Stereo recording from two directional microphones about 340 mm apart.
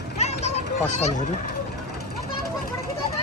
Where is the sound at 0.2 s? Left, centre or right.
Centre.